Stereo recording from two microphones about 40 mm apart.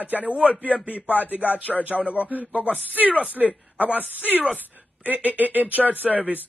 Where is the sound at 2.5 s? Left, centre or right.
Left.